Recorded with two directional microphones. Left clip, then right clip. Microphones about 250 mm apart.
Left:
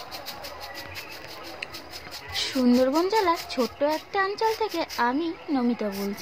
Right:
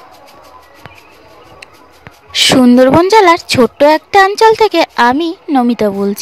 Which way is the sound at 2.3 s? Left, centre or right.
Right.